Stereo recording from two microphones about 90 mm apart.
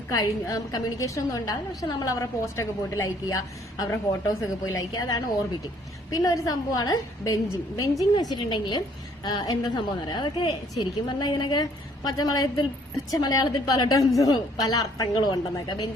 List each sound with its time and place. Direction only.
0.1 s a woman's voice: 40° left (ahead or behind); by 8.8 s 65° left (ahead or behind)
9.2 s a woman's voice: 50° left (ahead or behind)
11.6 s a woman's voice: 45° left (ahead or behind)